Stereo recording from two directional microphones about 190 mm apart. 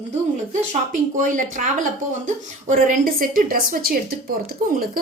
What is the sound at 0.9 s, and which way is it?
A woman's voice, 40° right (ahead or behind).